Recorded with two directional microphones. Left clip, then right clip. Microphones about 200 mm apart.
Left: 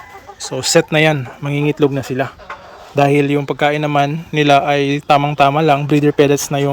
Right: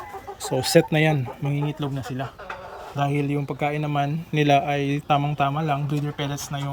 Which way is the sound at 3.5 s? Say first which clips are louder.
Left 11 dB; 35° left (ahead or behind).